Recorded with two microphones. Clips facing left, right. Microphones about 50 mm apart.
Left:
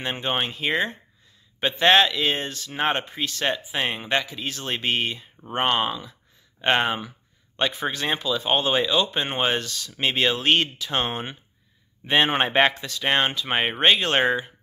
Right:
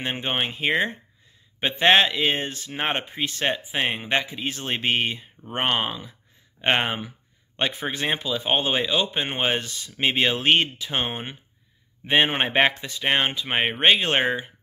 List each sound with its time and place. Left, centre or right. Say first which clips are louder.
0.0 s speech: even; centre
2.7 s speech: left 3 dB; centre
9.6 s speech: right 1 dB; right